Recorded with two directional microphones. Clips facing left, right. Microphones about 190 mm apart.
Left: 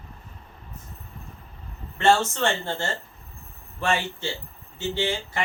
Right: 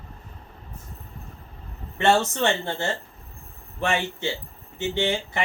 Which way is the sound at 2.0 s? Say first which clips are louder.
Even; 15° right (ahead or behind).